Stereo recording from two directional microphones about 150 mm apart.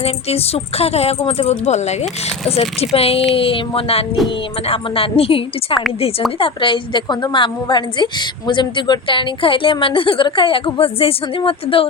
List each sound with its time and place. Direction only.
0.0 s a woman's voice: 40° left (ahead or behind)
6.4 s a woman's voice: 35° left (ahead or behind)